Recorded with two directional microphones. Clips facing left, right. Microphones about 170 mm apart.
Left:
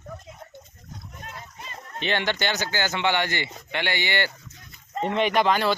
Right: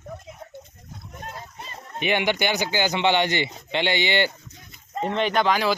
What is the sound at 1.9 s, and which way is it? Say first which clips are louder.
Speech: right 3 dB; 15° right (ahead or behind).